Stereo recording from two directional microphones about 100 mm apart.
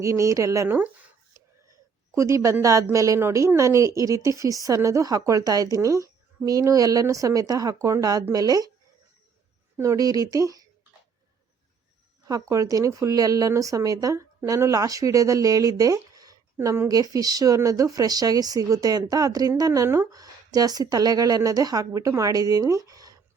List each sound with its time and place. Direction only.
0.0 s a woman's voice: 30° right (ahead or behind)
2.1 s a woman's voice: 30° right (ahead or behind)
9.7 s a woman's voice: 30° right (ahead or behind)
12.3 s a woman's voice: 35° right (ahead or behind)
16.6 s a woman's voice: 25° right (ahead or behind)
16.9 s a woman's voice: 40° right (ahead or behind)